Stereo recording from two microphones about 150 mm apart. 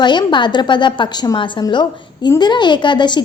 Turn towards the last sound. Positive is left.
turn(degrees=30)  # may be behind; listen again after turning